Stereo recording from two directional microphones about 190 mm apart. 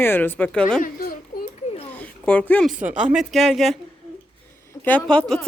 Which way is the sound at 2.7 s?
5° right (ahead or behind).